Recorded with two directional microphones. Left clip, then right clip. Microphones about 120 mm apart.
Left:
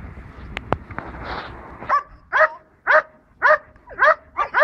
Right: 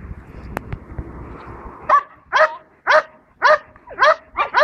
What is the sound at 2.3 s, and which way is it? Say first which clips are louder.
Dog: right 2 dB; 40° right (ahead or behind).